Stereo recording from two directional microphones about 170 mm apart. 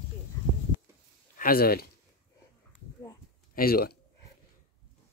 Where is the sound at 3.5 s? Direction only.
60° left (ahead or behind).